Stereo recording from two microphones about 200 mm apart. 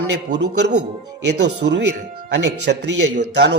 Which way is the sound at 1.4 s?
60° right (ahead or behind).